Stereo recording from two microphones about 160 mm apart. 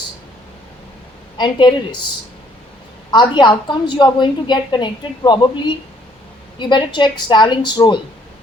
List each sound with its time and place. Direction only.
1.4 s a woman's voice: 30° left (ahead or behind)
3.1 s a woman's voice: 30° left (ahead or behind)